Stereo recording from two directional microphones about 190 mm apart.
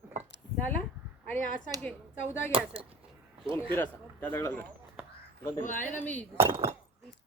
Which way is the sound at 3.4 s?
25° right (ahead or behind).